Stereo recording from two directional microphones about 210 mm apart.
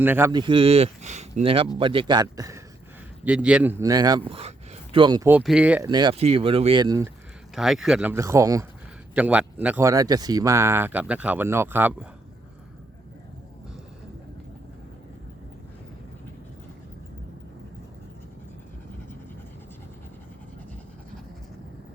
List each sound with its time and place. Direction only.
0.0 s a man's voice: 10° right (ahead or behind)
5.3 s speech: 5° right (ahead or behind)
5.9 s speech: 20° right (ahead or behind)
7.5 s speech: centre (ahead or behind)